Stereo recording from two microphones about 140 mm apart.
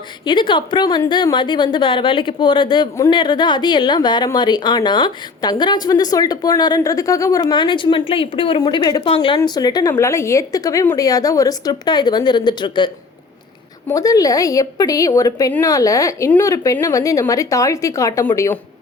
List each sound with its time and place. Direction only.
0.3 s a woman's voice: 35° left (ahead or behind)
9.0 s a woman's voice: 40° left (ahead or behind); by 18.6 s 20° left (ahead or behind)